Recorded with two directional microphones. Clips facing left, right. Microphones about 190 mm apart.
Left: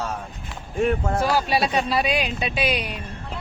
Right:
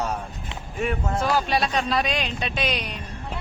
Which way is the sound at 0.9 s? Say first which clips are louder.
Left 2 dB; 50° left (ahead or behind).